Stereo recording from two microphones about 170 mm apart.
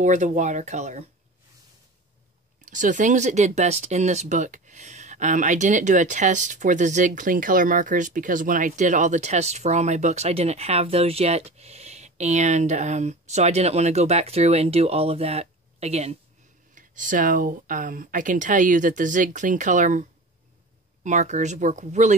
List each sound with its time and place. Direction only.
0.0 s speech: 45° right (ahead or behind)
2.6 s speech: 50° right (ahead or behind)
16.7 s speech: 50° right (ahead or behind)